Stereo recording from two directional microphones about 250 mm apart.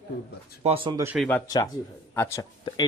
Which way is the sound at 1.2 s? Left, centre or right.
Centre.